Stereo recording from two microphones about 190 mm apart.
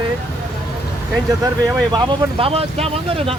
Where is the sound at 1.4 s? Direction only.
15° right (ahead or behind).